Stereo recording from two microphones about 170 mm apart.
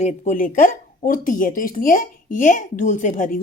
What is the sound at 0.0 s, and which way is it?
A woman's voice, 50° left (ahead or behind).